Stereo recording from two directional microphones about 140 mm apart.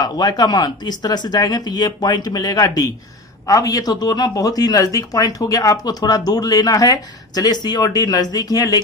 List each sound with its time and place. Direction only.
0.0 s speech: 30° left (ahead or behind)